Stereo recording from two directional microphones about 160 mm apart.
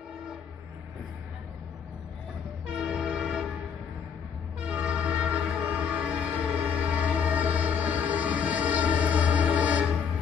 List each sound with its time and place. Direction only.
2.6 s train: 5° right (ahead or behind)
4.6 s train: 5° right (ahead or behind)